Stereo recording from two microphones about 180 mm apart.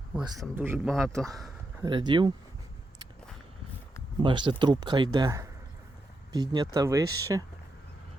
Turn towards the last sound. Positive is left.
turn(degrees=-20)  # may be behind; listen again after turning